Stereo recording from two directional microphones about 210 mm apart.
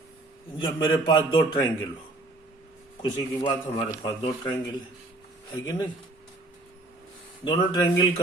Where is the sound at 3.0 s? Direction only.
20° left (ahead or behind).